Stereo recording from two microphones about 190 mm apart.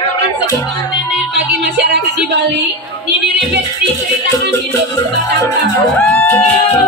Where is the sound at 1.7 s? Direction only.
60° right (ahead or behind).